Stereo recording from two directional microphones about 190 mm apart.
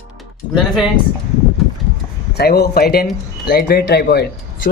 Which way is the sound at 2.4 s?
55° left (ahead or behind).